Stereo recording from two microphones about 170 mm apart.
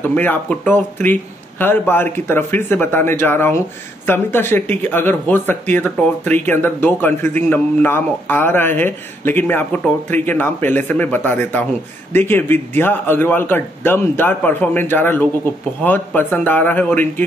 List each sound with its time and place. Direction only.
0.0 s a man's voice: 10° left (ahead or behind)